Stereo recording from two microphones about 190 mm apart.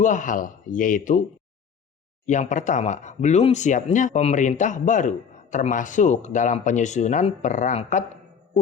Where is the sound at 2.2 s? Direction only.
40° left (ahead or behind).